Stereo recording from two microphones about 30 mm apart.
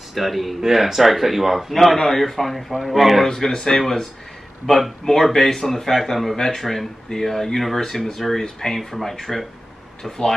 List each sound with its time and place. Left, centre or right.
0.1 s speech: centre
3.3 s speech: centre
6.6 s speech: centre